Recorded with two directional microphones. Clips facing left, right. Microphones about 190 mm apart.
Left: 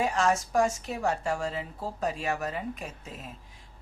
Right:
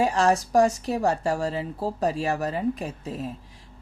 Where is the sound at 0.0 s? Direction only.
35° right (ahead or behind).